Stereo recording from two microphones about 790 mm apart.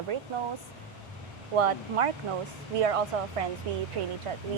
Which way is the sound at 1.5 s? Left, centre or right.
Right.